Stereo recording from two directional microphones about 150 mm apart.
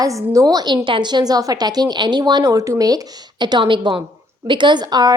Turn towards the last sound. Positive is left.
turn(degrees=-25)  # may be behind; listen again after turning